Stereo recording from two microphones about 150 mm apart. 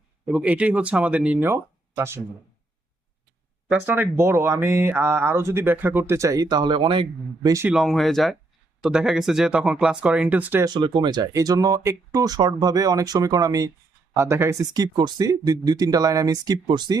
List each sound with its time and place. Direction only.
0.3 s speech: 10° right (ahead or behind)
3.7 s speech: 10° right (ahead or behind); by 7.5 s 35° right (ahead or behind)
7.7 s speech: centre (ahead or behind)
10.6 s speech: 30° right (ahead or behind)